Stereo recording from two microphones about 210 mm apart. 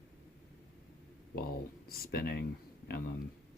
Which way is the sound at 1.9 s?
45° left (ahead or behind).